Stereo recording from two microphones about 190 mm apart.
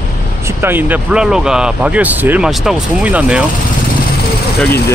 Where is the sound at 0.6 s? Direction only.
10° right (ahead or behind).